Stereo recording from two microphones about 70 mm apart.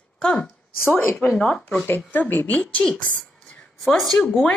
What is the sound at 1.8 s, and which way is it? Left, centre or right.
Speech, left.